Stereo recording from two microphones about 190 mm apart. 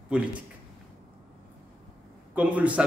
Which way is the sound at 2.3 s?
5° right (ahead or behind).